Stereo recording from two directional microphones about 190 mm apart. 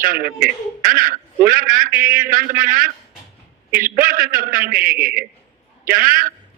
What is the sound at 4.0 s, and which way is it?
A man's voice, 45° right (ahead or behind).